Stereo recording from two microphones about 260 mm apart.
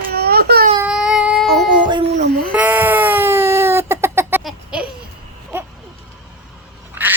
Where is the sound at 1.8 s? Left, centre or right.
Centre.